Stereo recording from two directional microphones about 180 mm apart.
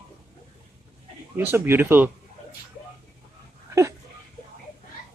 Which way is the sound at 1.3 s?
10° right (ahead or behind).